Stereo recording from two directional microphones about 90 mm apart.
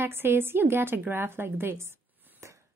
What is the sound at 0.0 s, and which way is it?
Speech, 25° right (ahead or behind).